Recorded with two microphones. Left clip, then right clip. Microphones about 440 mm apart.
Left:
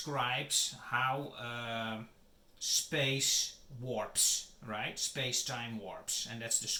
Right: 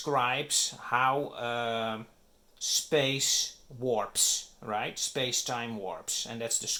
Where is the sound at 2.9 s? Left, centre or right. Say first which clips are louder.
Right 9 dB; centre.